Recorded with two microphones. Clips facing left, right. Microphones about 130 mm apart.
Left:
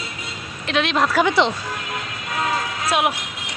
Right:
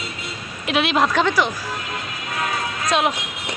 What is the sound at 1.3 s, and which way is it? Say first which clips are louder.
Speech: left 2 dB; 25° left (ahead or behind).